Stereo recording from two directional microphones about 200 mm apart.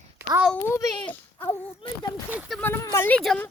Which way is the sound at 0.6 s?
15° left (ahead or behind).